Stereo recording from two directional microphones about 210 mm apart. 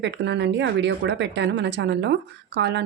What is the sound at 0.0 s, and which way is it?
Speech, 60° right (ahead or behind).